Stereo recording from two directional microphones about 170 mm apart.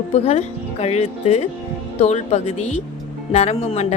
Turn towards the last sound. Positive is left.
turn(degrees=40)  # may be behind; listen again after turning